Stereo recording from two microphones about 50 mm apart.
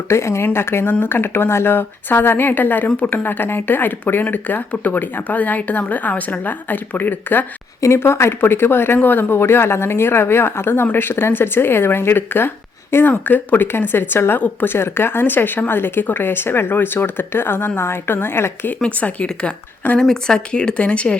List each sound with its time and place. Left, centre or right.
0.1 s speech: left
0.4 s a woman's voice: left
7.9 s a woman's voice: left
8.4 s speech: left
9.0 s speech: left
9.3 s speech: left
13.1 s speech: left
18.8 s speech: left
20.0 s speech: centre